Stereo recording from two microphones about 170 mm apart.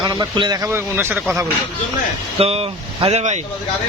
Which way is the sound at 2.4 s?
35° right (ahead or behind).